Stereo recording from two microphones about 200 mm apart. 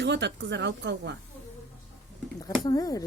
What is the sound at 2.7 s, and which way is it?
Speech, 20° left (ahead or behind).